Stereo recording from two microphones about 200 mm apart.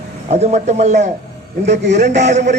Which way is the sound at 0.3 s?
35° right (ahead or behind).